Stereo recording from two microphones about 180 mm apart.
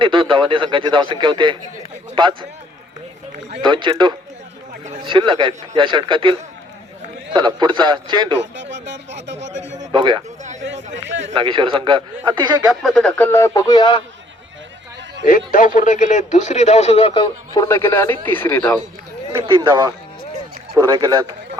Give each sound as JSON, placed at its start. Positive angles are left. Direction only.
{"t": 0.0, "sound": "speech", "side_deg": -25}
{"t": 3.6, "sound": "speech", "side_deg": -25}
{"t": 7.3, "sound": "speech", "side_deg": -25}
{"t": 8.4, "sound": "speech", "side_deg": -80}
{"t": 9.9, "sound": "speech", "side_deg": -25}
{"t": 10.9, "sound": "speech", "side_deg": -90}
{"t": 11.3, "sound": "speech", "side_deg": -30}
{"t": 12.8, "sound": "speech", "side_deg": 5}
{"t": 15.3, "sound": "speech", "side_deg": 50}
{"t": 17.5, "sound": "speech", "side_deg": 15}
{"t": 19.4, "sound": "speech", "side_deg": -30}